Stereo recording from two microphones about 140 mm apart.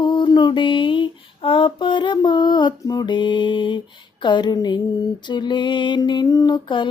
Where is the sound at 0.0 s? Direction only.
35° left (ahead or behind).